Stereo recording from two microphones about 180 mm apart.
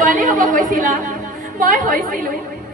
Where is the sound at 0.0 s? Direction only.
45° right (ahead or behind).